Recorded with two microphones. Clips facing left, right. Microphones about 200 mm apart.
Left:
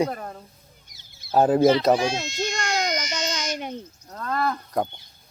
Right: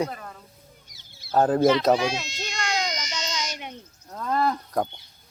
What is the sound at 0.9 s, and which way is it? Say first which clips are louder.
Bird: right 2 dB; 50° left (ahead or behind).